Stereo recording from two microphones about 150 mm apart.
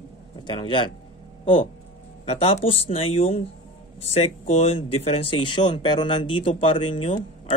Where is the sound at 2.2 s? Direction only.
40° left (ahead or behind).